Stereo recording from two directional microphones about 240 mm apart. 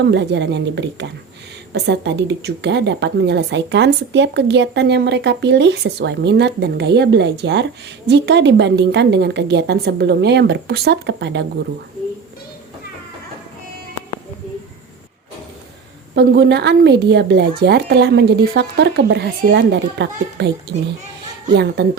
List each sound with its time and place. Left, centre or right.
0.0 s a woman's voice: right
16.1 s a woman's voice: right